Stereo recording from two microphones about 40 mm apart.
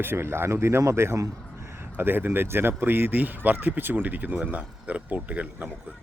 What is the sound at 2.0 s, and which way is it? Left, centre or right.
Speech, right.